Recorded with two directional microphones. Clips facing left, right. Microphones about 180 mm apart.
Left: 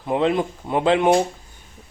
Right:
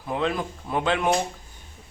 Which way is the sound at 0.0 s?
25° left (ahead or behind).